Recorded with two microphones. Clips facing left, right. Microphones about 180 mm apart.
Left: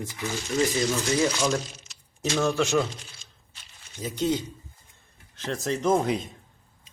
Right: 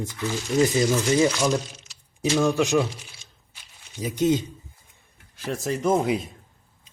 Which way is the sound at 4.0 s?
15° right (ahead or behind).